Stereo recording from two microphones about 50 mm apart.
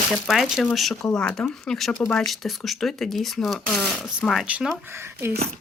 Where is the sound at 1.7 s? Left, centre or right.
Centre.